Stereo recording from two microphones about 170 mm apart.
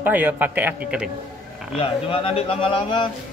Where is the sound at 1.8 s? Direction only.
35° left (ahead or behind).